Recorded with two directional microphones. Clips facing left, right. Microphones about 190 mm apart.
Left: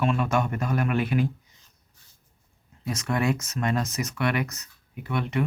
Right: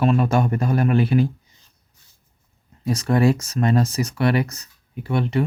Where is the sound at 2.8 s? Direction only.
35° right (ahead or behind).